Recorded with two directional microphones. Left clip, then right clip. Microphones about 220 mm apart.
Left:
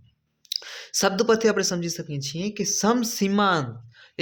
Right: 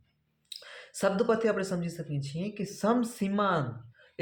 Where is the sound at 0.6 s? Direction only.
50° left (ahead or behind).